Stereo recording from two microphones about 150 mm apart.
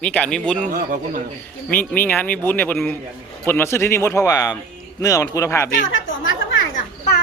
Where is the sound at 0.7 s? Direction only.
70° right (ahead or behind).